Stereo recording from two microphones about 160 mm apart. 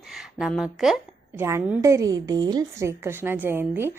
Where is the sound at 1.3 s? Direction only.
15° right (ahead or behind).